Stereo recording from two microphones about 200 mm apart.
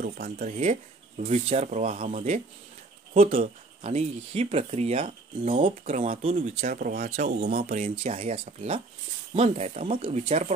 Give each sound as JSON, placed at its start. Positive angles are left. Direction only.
{"t": 0.0, "sound": "speech", "side_deg": -45}
{"t": 7.1, "sound": "speech", "side_deg": -35}
{"t": 7.3, "sound": "speech", "side_deg": -50}
{"t": 8.0, "sound": "speech", "side_deg": -30}